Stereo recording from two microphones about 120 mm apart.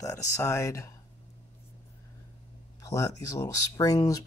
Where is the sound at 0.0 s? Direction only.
25° left (ahead or behind).